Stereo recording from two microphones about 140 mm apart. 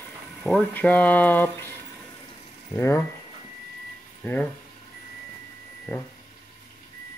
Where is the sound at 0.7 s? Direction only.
10° left (ahead or behind).